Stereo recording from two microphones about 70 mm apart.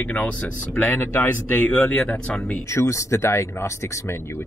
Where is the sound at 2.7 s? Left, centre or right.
Left.